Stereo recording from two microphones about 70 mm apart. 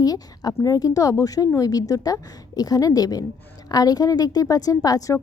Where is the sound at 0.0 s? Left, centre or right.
Left.